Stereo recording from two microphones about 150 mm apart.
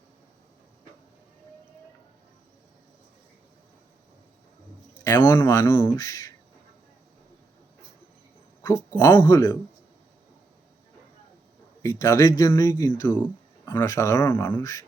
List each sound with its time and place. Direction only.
5.0 s speech: 15° left (ahead or behind)
8.6 s speech: 20° left (ahead or behind)
11.8 s speech: 20° left (ahead or behind)